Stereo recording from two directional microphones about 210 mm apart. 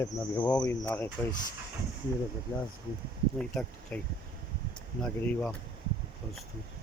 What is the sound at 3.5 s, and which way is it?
Speech, 5° left (ahead or behind).